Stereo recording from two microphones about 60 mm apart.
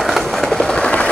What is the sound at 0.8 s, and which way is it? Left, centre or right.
Train, centre.